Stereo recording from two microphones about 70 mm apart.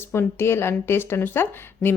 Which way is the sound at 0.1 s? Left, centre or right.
Left.